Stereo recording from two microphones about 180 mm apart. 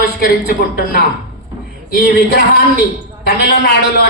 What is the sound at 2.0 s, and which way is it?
Speech, 55° left (ahead or behind).